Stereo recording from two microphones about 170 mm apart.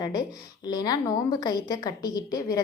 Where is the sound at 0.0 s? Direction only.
25° left (ahead or behind).